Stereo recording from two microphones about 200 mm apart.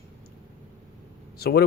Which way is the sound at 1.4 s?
50° left (ahead or behind).